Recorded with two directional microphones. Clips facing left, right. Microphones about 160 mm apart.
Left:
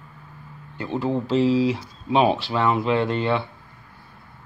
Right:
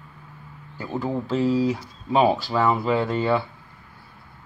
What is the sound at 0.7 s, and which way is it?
Speech, centre (ahead or behind).